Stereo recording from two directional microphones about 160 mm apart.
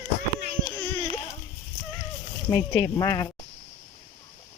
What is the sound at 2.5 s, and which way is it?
Speech, 20° left (ahead or behind).